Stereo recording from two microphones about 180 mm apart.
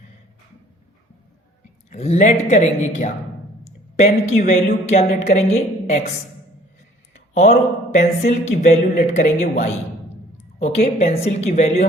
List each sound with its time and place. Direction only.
1.9 s a woman's voice: 40° left (ahead or behind)
7.1 s a sound: 40° left (ahead or behind)
7.9 s a woman's voice: 40° left (ahead or behind)